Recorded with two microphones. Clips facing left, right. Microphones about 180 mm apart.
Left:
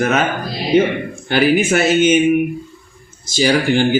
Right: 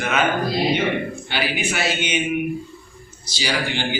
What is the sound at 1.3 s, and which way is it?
Speech, 50° left (ahead or behind).